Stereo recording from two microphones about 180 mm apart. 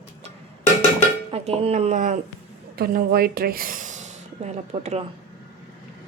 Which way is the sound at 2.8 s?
60° right (ahead or behind).